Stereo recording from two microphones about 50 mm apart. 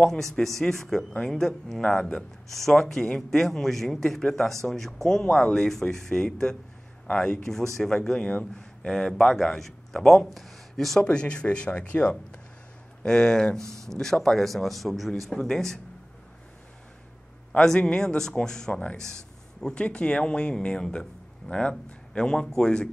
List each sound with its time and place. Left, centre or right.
0.0 s a man's voice: centre
7.1 s speech: left; by 11.0 s centre
11.0 s speech: centre
13.6 s speech: right
13.8 s a man's voice: centre
17.7 s speech: centre
19.6 s speech: left